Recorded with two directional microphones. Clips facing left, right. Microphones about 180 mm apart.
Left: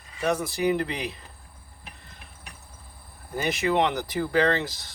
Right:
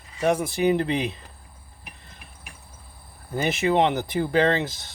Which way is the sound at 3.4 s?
25° right (ahead or behind).